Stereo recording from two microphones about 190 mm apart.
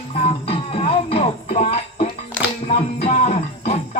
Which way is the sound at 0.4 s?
30° left (ahead or behind).